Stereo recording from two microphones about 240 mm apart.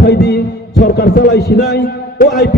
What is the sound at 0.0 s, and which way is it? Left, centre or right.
Heart sounds, left.